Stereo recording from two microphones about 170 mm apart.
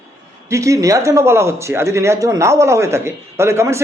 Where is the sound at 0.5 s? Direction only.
20° right (ahead or behind).